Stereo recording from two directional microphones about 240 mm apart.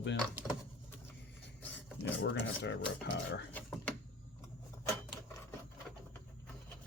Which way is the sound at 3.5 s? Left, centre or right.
Centre.